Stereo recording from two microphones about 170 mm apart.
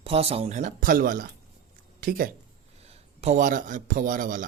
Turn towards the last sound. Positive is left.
turn(degrees=-50)  # may be behind; listen again after turning